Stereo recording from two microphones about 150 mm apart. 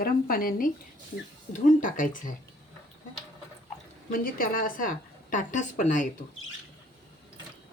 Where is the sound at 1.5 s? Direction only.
60° left (ahead or behind).